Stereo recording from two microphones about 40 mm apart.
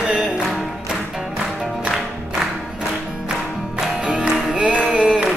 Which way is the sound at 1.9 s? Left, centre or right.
Centre.